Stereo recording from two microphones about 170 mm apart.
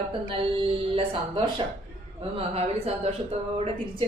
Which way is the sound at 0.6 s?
30° right (ahead or behind).